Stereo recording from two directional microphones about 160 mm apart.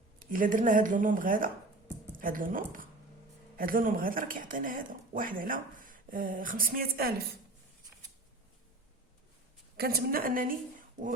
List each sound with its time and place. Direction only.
0.2 s speech: 60° right (ahead or behind)
9.7 s a woman's voice: 75° right (ahead or behind)